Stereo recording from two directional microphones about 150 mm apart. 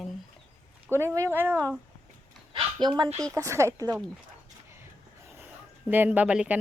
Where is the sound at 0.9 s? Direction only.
15° right (ahead or behind).